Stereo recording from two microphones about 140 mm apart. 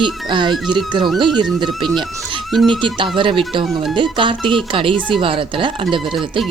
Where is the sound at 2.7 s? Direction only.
35° right (ahead or behind).